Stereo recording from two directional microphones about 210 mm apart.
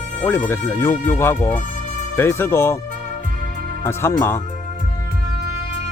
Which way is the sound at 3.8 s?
10° left (ahead or behind).